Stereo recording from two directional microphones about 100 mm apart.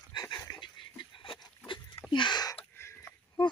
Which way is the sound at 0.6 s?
50° left (ahead or behind).